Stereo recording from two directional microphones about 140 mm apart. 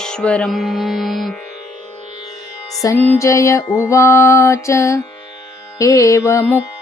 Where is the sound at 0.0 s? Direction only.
5° left (ahead or behind).